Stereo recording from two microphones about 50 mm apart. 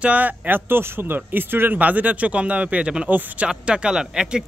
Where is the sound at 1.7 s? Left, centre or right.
Right.